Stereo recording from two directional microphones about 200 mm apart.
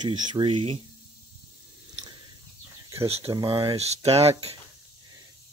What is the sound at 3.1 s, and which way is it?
Speech, 25° right (ahead or behind).